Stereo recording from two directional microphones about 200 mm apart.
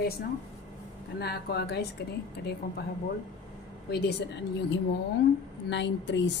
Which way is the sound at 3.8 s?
55° left (ahead or behind).